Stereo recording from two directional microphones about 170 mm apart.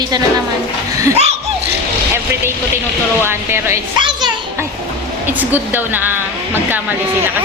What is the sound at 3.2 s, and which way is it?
Speech, 15° right (ahead or behind).